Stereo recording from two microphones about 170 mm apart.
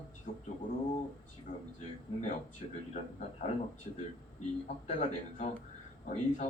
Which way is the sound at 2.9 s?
45° left (ahead or behind).